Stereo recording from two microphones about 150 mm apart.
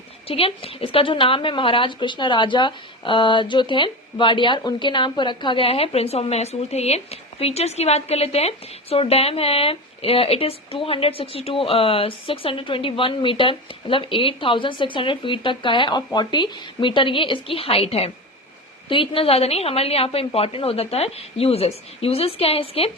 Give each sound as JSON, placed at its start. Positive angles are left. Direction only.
{"t": 0.3, "sound": "a woman's voice", "side_deg": 40}